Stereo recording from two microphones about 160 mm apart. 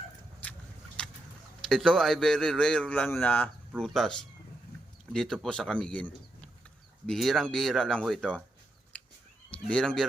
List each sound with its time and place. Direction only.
1.6 s speech: 5° left (ahead or behind)
9.5 s speech: 5° left (ahead or behind)